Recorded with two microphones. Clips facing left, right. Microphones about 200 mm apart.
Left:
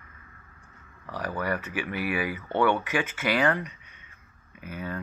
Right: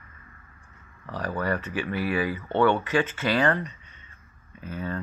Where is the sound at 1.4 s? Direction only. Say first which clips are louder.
Right 2 dB; 15° left (ahead or behind).